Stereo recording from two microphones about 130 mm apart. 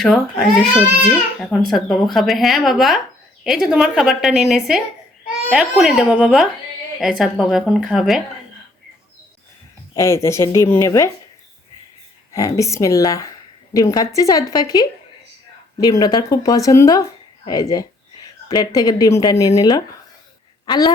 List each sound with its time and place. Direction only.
0.0 s speech: centre (ahead or behind)
10.0 s speech: 20° left (ahead or behind)
12.3 s speech: 25° left (ahead or behind)